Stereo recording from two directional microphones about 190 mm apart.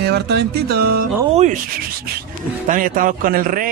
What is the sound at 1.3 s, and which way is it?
Rub, 40° right (ahead or behind).